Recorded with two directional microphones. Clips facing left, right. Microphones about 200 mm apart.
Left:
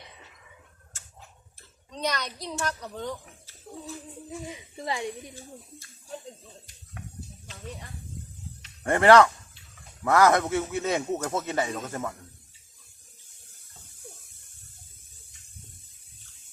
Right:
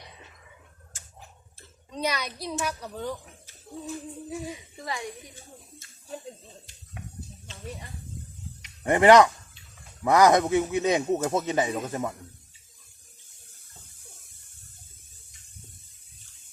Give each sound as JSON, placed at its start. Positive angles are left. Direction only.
{"t": 1.9, "sound": "speech", "side_deg": -10}
{"t": 4.8, "sound": "a woman's voice", "side_deg": 20}
{"t": 8.6, "sound": "a man's voice", "side_deg": -15}